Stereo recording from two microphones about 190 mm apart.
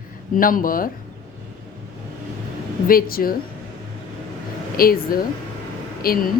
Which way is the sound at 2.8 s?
50° left (ahead or behind).